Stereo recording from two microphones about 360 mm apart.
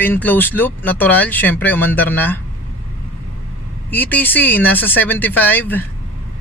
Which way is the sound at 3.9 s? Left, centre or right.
Centre.